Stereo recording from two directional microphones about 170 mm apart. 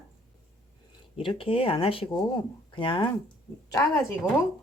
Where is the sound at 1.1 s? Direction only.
30° left (ahead or behind).